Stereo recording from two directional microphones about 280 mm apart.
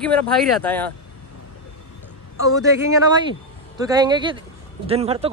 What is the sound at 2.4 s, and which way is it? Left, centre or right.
Speech, centre.